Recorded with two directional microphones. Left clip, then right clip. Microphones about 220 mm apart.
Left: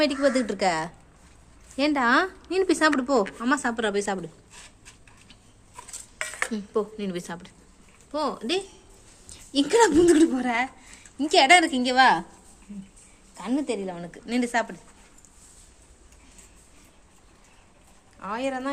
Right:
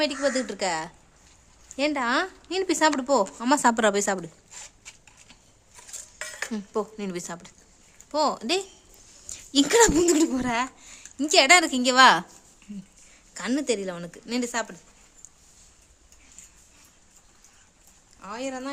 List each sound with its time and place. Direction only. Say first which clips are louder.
0.0 s a woman's voice: left 3 dB; centre (ahead or behind)
3.4 s a woman's voice: right 4 dB; 30° right (ahead or behind)
6.5 s a woman's voice: left 2 dB; 25° right (ahead or behind)
13.3 s a woman's voice: right 2 dB; 40° right (ahead or behind)
14.3 s speech: left 3 dB; 20° right (ahead or behind)
18.2 s a woman's voice: left 4 dB; centre (ahead or behind)